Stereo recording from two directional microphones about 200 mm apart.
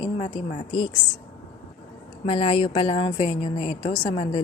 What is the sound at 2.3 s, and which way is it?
A woman's voice, 30° left (ahead or behind).